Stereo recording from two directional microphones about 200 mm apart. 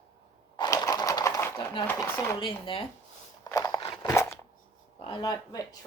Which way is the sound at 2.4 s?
25° left (ahead or behind).